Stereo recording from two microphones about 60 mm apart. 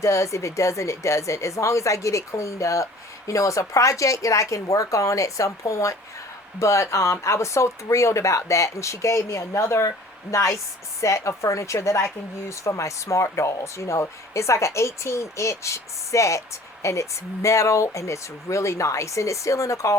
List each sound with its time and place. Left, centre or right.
0.0 s speech: left